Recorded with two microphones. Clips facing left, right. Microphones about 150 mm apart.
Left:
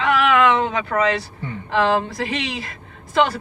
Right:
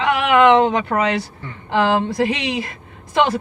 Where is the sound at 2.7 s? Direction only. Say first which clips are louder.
Right 1 dB; 20° right (ahead or behind).